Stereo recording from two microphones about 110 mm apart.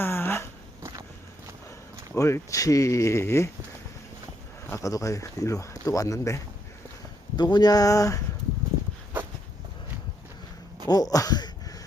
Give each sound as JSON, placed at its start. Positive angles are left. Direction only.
{"t": 0.0, "sound": "a sound", "side_deg": 20}
{"t": 0.8, "sound": "walk", "side_deg": -30}
{"t": 2.1, "sound": "speech", "side_deg": 25}
{"t": 4.7, "sound": "speech", "side_deg": 30}
{"t": 7.3, "sound": "speech", "side_deg": 40}
{"t": 10.8, "sound": "speech", "side_deg": 35}